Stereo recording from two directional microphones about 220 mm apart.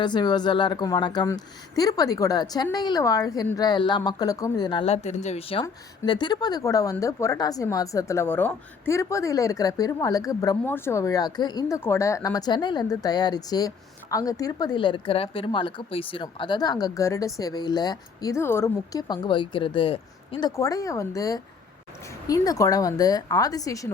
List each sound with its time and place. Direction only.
0.0 s speech: 20° left (ahead or behind)
5.6 s speech: 15° left (ahead or behind)